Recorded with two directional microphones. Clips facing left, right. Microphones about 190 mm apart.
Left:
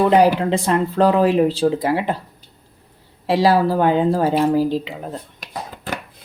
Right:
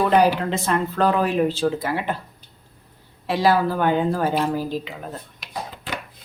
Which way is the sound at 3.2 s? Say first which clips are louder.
Left 4 dB; 30° left (ahead or behind).